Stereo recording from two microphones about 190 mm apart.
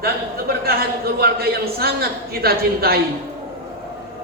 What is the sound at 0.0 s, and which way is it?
A man's voice, 55° right (ahead or behind).